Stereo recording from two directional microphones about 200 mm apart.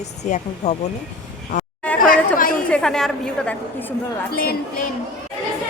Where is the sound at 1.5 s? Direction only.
40° left (ahead or behind).